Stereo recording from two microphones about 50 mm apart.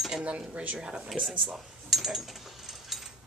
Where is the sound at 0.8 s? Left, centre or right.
Centre.